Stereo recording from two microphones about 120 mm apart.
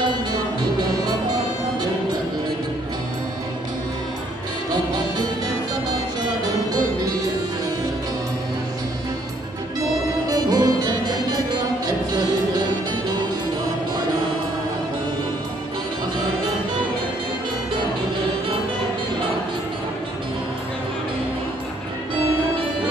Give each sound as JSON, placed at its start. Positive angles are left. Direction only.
{"t": 6.4, "sound": "music", "side_deg": -30}
{"t": 9.8, "sound": "music", "side_deg": -30}